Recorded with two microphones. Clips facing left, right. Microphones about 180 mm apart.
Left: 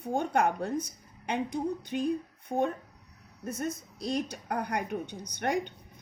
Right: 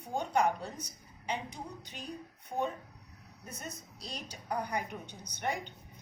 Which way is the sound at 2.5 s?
30° left (ahead or behind).